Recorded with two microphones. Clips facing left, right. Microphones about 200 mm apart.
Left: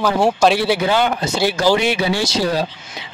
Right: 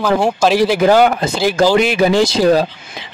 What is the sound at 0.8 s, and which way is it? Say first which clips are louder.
Speech: right 7 dB; 50° right (ahead or behind).